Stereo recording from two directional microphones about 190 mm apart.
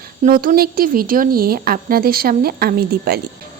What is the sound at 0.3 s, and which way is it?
Speech, 50° right (ahead or behind).